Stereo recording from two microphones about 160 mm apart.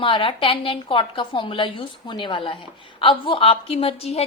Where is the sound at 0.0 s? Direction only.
35° left (ahead or behind).